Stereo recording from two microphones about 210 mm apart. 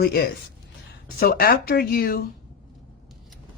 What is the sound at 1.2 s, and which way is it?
Speech, 45° left (ahead or behind).